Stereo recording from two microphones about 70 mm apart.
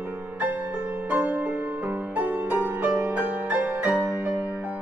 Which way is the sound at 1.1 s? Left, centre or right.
Right.